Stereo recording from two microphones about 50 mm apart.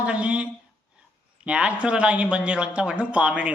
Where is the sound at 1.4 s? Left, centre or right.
Right.